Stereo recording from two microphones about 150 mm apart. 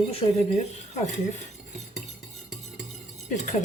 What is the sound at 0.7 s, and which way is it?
Speech, 50° left (ahead or behind).